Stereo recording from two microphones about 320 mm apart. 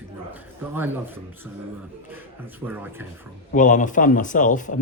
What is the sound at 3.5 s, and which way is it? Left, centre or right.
A man's voice, left.